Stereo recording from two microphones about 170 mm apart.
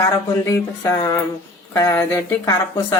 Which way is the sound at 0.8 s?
20° left (ahead or behind).